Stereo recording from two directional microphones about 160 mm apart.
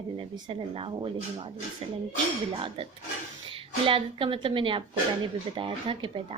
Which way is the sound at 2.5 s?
35° right (ahead or behind).